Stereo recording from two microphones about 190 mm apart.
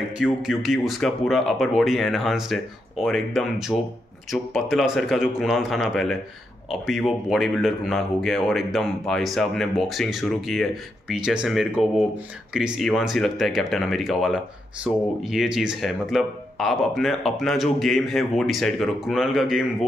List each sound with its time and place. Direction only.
0.2 s speech: centre (ahead or behind)